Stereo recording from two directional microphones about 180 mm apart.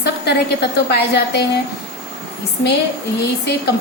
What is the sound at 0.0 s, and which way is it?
A woman's voice, 65° left (ahead or behind).